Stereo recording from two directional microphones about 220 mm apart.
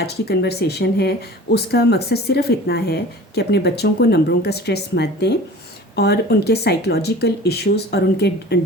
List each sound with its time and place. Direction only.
0.0 s speech: 45° left (ahead or behind)